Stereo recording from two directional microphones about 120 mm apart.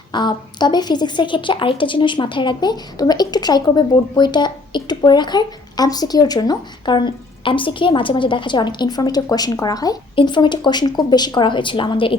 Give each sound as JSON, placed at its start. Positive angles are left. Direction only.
{"t": 0.1, "sound": "speech", "side_deg": 40}